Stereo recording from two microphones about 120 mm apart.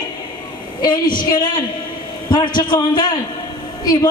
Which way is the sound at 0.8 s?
40° left (ahead or behind).